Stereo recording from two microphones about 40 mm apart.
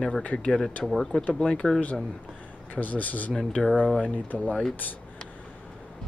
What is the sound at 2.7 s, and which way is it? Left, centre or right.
Speech, left.